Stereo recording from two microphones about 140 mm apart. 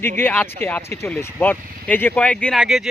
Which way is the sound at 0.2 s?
15° left (ahead or behind).